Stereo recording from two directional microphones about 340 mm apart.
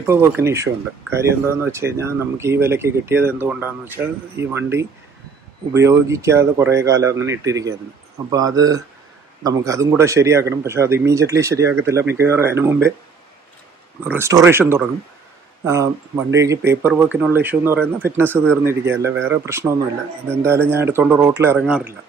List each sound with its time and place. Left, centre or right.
0.0 s speech: centre
14.0 s speech: centre